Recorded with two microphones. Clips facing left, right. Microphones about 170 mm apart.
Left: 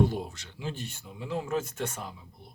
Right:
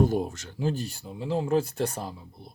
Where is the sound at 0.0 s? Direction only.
45° right (ahead or behind).